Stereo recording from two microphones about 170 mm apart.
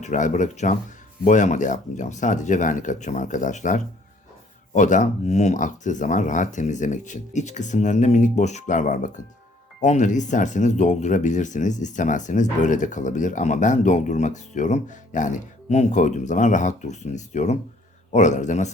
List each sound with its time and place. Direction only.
0.0 s speech: 45° left (ahead or behind)